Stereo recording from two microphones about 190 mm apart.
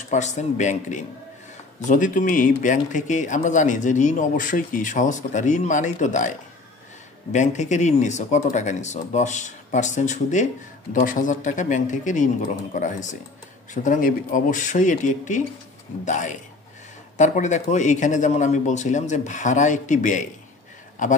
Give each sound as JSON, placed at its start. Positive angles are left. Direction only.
{"t": 0.1, "sound": "speech", "side_deg": 40}
{"t": 7.3, "sound": "speech", "side_deg": 40}